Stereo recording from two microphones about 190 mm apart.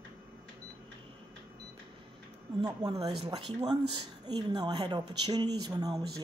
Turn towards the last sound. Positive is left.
turn(degrees=-20)  # may be behind; listen again after turning